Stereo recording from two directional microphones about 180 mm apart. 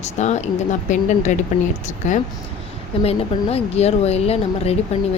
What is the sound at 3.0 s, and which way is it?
Speech, 35° left (ahead or behind).